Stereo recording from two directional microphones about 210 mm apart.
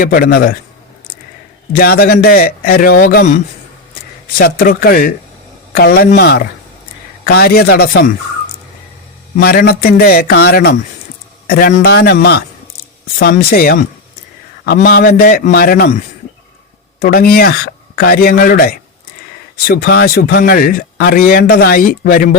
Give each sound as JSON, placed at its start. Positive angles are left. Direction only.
{"t": 0.0, "sound": "speech", "side_deg": 45}
{"t": 1.7, "sound": "speech", "side_deg": 45}
{"t": 4.4, "sound": "speech", "side_deg": 45}
{"t": 9.3, "sound": "speech", "side_deg": 45}